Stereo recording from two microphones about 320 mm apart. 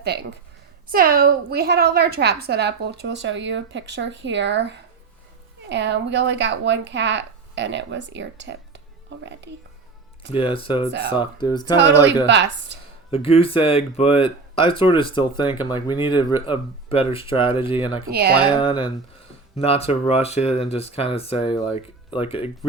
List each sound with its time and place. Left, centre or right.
0.0 s a woman's voice: right
10.3 s speech: centre
12.3 s a woman's voice: right
13.1 s speech: centre
18.1 s speech: right
18.6 s speech: centre